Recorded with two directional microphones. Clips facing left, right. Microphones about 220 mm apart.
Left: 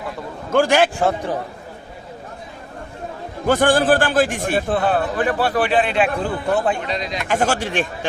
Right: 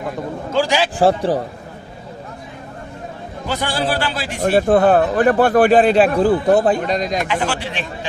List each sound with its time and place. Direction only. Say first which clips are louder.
0.5 s a man's voice: left 3 dB; 55° left (ahead or behind)
0.9 s a man's voice: right 5 dB; 35° right (ahead or behind)
3.4 s a man's voice: left 6 dB; 50° left (ahead or behind)
4.6 s a man's voice: right 7 dB; 45° right (ahead or behind)
7.3 s a man's voice: left 2 dB; 45° left (ahead or behind)